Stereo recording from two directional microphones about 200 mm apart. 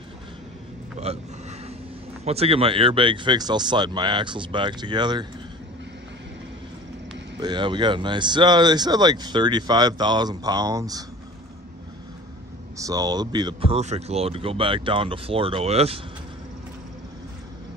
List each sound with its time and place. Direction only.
0.9 s a sound: 30° right (ahead or behind)
2.2 s speech: 30° right (ahead or behind)
7.3 s speech: 20° right (ahead or behind)
12.7 s speech: 15° right (ahead or behind)